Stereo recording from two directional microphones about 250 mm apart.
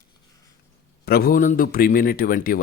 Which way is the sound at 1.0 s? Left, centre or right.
Left.